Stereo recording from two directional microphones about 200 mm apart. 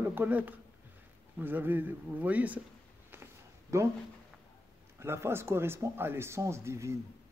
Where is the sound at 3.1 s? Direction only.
10° right (ahead or behind).